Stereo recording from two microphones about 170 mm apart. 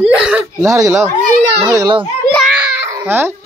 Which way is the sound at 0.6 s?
20° right (ahead or behind).